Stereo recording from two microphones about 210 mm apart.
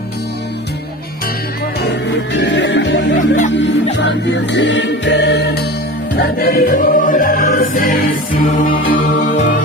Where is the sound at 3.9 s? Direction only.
55° left (ahead or behind).